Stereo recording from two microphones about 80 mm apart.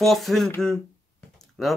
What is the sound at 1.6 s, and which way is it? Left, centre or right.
Speech, centre.